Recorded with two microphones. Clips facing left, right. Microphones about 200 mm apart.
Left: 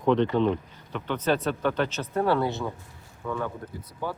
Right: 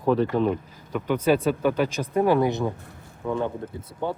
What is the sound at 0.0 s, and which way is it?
Speech, 5° right (ahead or behind).